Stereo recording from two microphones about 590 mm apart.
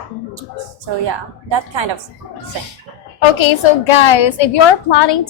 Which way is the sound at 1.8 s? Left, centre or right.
Right.